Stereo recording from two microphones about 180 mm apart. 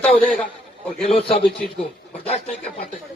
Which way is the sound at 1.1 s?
30° left (ahead or behind).